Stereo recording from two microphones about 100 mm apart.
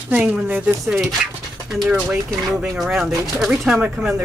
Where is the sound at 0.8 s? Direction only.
5° right (ahead or behind).